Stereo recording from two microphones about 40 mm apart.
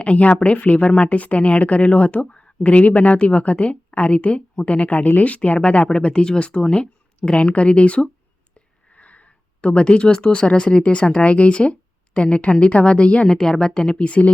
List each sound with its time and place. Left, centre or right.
0.0 s a woman's voice: left
8.5 s a sound: left
10.4 s speech: left
13.2 s speech: centre
14.0 s a woman's voice: left